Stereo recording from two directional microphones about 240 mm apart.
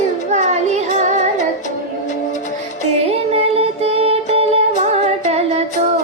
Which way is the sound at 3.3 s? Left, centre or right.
Right.